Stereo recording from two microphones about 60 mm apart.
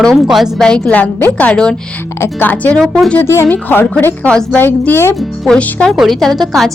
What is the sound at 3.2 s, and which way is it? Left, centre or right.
Speech, left.